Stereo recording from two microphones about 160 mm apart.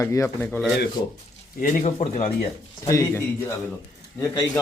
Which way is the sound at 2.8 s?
20° left (ahead or behind).